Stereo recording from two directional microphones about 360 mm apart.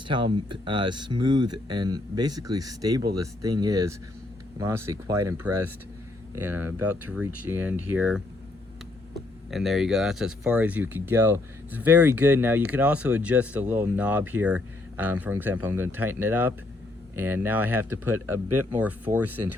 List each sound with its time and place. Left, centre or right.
0.1 s speech: centre
18.4 s speech: right
18.7 s speech: centre